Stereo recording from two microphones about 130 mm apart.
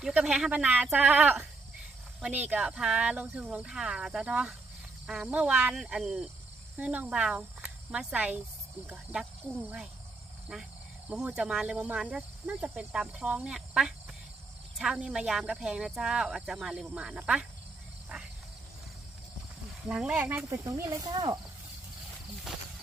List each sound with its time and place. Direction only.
0.0 s speech: 5° right (ahead or behind)
2.5 s speech: 5° right (ahead or behind)
18.1 s insect: 5° right (ahead or behind)
19.9 s speech: 5° right (ahead or behind)
20.5 s speech: 20° right (ahead or behind)
22.5 s a sound: 5° right (ahead or behind)